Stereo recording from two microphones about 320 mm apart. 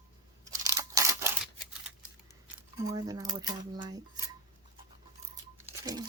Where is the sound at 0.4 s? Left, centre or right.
Centre.